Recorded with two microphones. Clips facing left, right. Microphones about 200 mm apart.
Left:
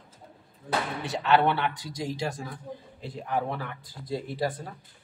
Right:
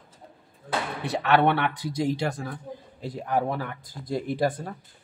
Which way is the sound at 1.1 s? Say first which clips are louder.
Right 2 dB; 60° right (ahead or behind).